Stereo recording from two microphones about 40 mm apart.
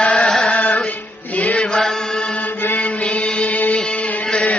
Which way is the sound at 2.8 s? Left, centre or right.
Left.